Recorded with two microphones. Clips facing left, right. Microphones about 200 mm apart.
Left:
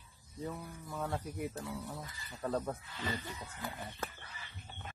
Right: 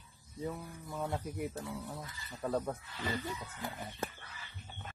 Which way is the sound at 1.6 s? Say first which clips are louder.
Even; 20° right (ahead or behind).